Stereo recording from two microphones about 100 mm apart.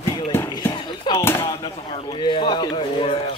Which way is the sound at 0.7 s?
50° left (ahead or behind).